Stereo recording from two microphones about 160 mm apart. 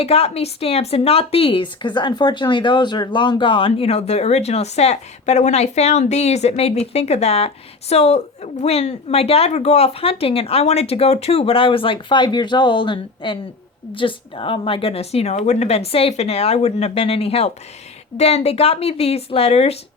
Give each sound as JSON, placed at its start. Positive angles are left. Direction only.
{"t": 0.0, "sound": "a woman's voice", "side_deg": 40}